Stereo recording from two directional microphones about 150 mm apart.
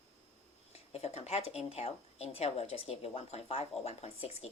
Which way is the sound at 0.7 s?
45° left (ahead or behind).